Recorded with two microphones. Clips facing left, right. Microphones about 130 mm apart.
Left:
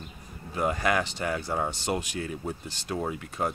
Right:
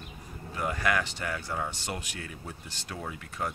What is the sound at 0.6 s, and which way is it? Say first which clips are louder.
Speech: left 3 dB; 25° left (ahead or behind).